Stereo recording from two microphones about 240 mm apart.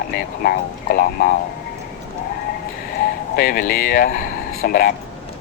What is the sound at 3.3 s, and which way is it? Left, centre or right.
Speech, left.